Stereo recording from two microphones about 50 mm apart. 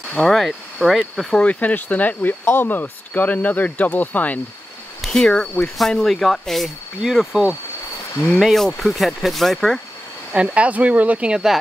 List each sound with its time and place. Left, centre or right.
0.1 s speech: centre
1.3 s speech: left
5.0 s speech: centre
7.0 s speech: centre
10.3 s speech: right